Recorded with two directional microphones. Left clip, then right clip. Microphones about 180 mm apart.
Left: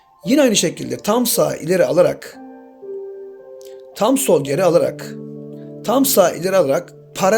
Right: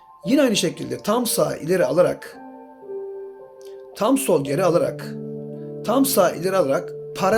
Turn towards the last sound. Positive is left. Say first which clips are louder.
# left 4 dB
turn(degrees=30)  # may be behind; listen again after turning